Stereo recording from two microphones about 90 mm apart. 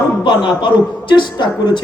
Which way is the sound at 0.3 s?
60° left (ahead or behind).